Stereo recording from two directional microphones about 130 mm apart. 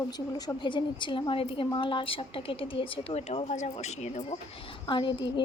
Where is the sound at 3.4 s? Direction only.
65° left (ahead or behind).